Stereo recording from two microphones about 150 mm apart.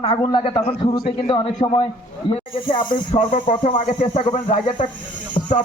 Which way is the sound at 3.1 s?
45° left (ahead or behind).